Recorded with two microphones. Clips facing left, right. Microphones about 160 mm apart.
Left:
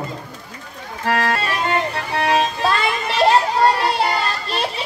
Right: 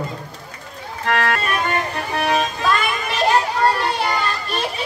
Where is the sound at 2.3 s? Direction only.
30° left (ahead or behind).